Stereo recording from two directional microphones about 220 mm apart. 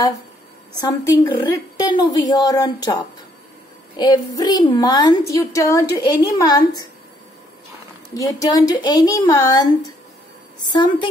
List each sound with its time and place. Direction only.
0.7 s a woman's voice: 15° left (ahead or behind)
8.1 s a woman's voice: 15° left (ahead or behind)